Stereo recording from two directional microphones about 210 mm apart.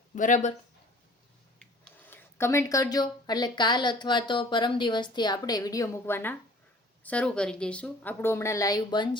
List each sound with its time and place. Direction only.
0.2 s speech: 35° left (ahead or behind)
2.0 s a woman's voice: 10° left (ahead or behind)